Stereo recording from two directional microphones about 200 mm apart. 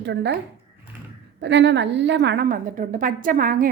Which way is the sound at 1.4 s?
60° right (ahead or behind).